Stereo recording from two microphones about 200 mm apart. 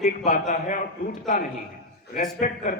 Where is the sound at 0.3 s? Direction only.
40° left (ahead or behind).